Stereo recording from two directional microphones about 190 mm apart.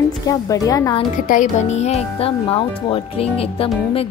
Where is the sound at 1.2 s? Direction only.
45° left (ahead or behind).